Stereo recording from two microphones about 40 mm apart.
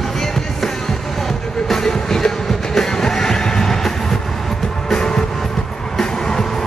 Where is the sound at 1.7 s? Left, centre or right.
Centre.